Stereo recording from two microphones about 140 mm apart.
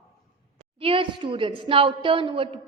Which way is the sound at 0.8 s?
40° right (ahead or behind).